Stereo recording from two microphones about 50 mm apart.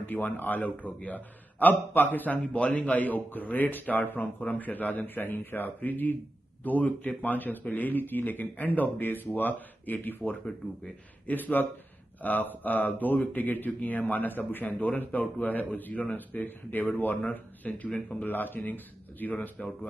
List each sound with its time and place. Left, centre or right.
0.0 s a man's voice: left